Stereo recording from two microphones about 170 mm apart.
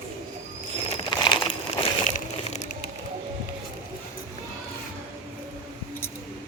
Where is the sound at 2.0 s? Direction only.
45° left (ahead or behind).